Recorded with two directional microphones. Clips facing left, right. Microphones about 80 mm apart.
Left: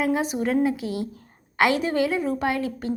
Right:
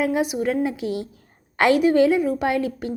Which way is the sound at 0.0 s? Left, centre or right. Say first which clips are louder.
Right 2 dB; left.